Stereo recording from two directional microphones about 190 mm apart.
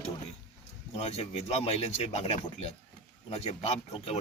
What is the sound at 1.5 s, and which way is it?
A man's voice, 35° left (ahead or behind).